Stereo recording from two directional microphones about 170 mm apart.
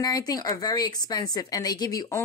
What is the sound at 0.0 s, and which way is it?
A woman's voice, 20° left (ahead or behind).